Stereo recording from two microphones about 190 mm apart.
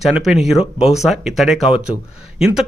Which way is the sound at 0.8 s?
35° left (ahead or behind).